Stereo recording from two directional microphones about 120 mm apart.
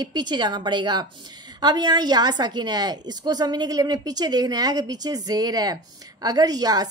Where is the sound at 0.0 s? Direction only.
35° right (ahead or behind).